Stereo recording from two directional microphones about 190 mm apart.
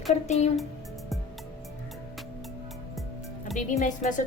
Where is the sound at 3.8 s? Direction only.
40° left (ahead or behind).